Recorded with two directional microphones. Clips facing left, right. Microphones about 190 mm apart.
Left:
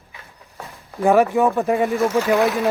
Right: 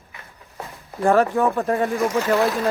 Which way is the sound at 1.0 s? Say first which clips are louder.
Left 2 dB; 10° left (ahead or behind).